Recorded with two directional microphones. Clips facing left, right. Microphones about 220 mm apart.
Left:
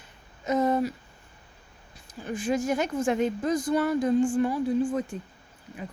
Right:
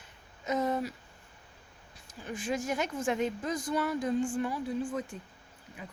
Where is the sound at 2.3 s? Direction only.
40° left (ahead or behind).